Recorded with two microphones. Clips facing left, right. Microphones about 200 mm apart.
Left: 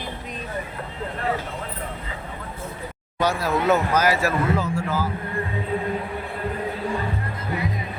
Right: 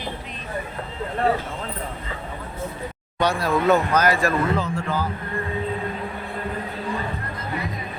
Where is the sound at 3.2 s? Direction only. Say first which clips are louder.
Right 1 dB; 5° left (ahead or behind).